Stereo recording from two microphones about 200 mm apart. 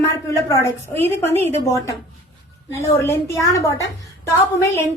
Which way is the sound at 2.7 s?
15° left (ahead or behind).